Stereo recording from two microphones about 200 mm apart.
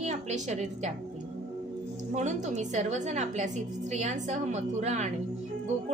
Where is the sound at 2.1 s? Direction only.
35° right (ahead or behind).